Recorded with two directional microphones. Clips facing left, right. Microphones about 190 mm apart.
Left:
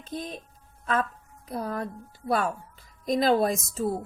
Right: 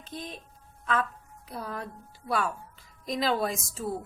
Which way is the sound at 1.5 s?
40° left (ahead or behind).